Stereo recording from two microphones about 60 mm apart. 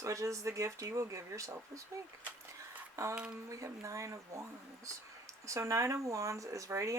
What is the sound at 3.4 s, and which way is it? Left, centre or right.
Speech, right.